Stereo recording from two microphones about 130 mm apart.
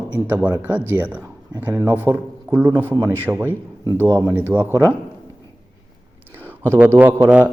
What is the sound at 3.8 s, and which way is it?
Speech, 15° left (ahead or behind).